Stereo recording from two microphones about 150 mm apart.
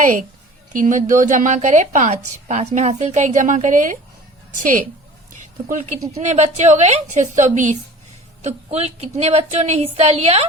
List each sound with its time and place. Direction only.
0.7 s a woman's voice: 60° right (ahead or behind)
5.4 s a woman's voice: 55° right (ahead or behind)